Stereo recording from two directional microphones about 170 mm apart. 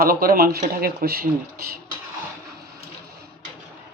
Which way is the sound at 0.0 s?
60° right (ahead or behind).